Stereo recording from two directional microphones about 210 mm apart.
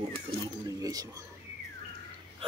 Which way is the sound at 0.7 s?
15° right (ahead or behind).